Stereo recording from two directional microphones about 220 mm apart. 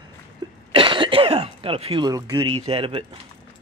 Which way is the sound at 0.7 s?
20° right (ahead or behind).